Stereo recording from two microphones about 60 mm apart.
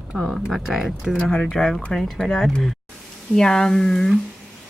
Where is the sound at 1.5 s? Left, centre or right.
Centre.